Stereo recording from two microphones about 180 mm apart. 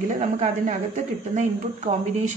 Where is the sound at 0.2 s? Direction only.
40° right (ahead or behind).